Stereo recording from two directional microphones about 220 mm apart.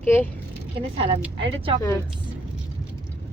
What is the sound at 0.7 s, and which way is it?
Speech, 25° right (ahead or behind).